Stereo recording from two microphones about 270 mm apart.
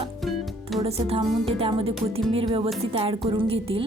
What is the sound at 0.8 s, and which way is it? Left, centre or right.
A woman's voice, right.